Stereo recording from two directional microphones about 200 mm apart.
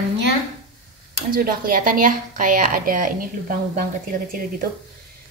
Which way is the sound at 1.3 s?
45° right (ahead or behind).